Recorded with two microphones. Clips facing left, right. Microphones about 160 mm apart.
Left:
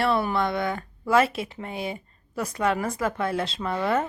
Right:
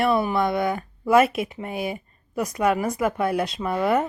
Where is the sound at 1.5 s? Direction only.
15° right (ahead or behind).